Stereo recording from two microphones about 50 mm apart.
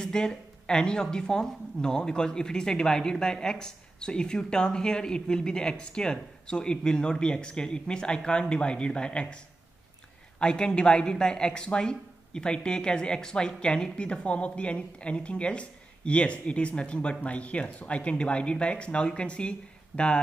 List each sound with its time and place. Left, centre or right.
0.0 s speech: centre
10.4 s speech: centre